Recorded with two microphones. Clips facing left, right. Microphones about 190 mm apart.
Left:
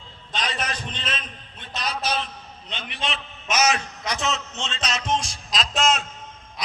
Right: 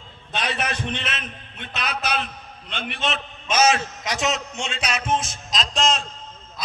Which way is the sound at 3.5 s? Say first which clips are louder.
Right 3 dB; 25° right (ahead or behind).